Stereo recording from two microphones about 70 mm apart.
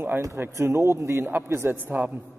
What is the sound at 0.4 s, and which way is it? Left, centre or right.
A man's voice, right.